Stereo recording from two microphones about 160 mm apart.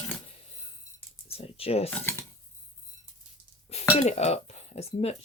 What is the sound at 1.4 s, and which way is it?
Speech, 40° left (ahead or behind).